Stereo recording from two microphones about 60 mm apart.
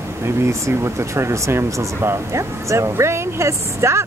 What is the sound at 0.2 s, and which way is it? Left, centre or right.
Speech, right.